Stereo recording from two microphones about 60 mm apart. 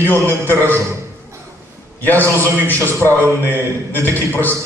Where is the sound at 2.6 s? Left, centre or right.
Left.